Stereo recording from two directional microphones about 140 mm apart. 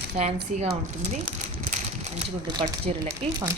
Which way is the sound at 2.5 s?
30° right (ahead or behind).